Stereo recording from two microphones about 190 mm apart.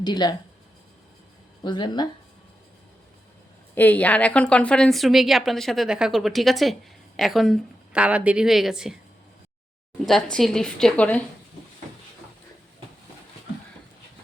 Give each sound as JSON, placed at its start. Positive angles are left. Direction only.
{"t": 0.0, "sound": "speech", "side_deg": 20}
{"t": 1.6, "sound": "speech", "side_deg": 25}
{"t": 3.8, "sound": "a woman's voice", "side_deg": 10}
{"t": 10.1, "sound": "a woman's voice", "side_deg": 5}